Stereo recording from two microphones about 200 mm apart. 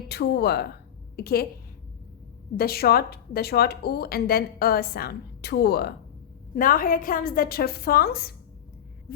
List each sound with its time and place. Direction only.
0.1 s a woman's voice: 55° left (ahead or behind)
2.6 s a woman's voice: 50° left (ahead or behind)
9.1 s a sound: 45° left (ahead or behind)